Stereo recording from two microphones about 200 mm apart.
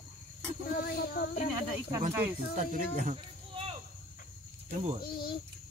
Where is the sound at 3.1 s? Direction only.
30° right (ahead or behind).